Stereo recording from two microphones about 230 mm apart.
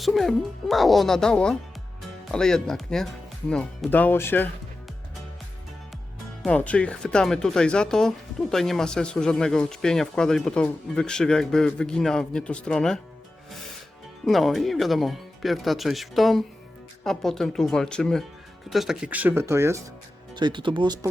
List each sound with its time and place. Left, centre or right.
0.0 s speech: centre
6.4 s speech: centre
14.3 s speech: centre